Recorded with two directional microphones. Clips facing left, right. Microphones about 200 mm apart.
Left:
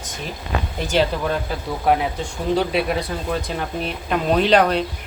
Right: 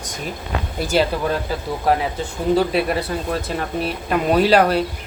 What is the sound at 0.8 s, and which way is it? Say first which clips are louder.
Speech: right 1 dB; 10° right (ahead or behind).